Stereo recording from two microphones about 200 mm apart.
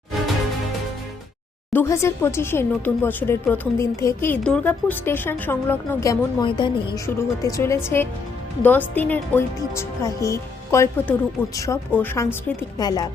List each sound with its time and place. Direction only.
1.7 s speech: 15° left (ahead or behind)